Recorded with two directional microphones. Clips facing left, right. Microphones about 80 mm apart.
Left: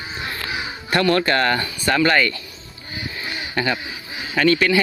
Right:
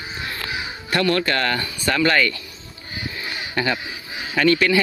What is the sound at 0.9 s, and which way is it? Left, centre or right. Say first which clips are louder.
Speech: left 2 dB; left.